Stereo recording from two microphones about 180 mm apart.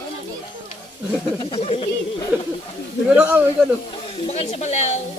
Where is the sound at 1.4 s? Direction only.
30° left (ahead or behind).